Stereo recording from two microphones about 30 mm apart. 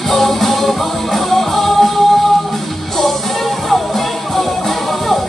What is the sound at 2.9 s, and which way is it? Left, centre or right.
Music, centre.